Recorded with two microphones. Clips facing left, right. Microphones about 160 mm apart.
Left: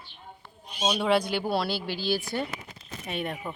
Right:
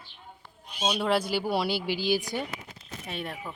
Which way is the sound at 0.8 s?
Centre (ahead or behind).